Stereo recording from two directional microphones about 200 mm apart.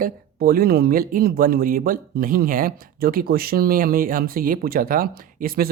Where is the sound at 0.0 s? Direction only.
50° right (ahead or behind).